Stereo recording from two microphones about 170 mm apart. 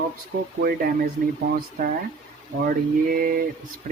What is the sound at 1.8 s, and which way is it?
Speech, 55° right (ahead or behind).